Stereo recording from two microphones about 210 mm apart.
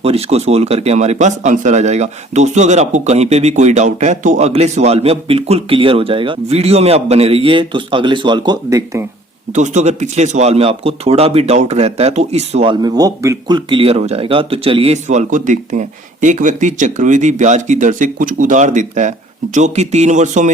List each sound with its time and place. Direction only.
0.0 s a man's voice: 30° right (ahead or behind)
9.6 s a man's voice: 35° right (ahead or behind)
12.8 s speech: 20° right (ahead or behind); by 20.5 s 35° right (ahead or behind)